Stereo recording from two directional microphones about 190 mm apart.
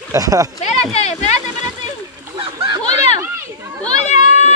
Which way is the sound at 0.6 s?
35° left (ahead or behind).